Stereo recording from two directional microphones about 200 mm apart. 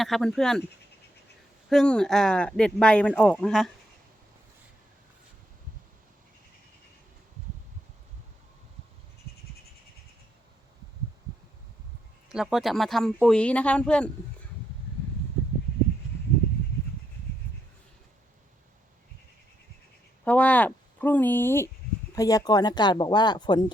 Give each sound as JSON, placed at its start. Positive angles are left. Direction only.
{"t": 0.0, "sound": "speech", "side_deg": 0}
{"t": 1.7, "sound": "speech", "side_deg": 5}
{"t": 12.3, "sound": "speech", "side_deg": 0}
{"t": 20.2, "sound": "speech", "side_deg": 5}